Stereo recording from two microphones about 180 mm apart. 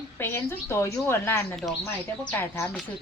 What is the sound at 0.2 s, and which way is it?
A woman's voice, 15° left (ahead or behind).